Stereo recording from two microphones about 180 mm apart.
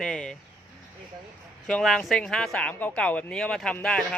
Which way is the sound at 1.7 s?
5° left (ahead or behind).